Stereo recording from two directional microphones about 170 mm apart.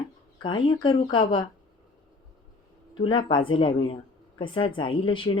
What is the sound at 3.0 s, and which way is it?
Speech, 30° left (ahead or behind).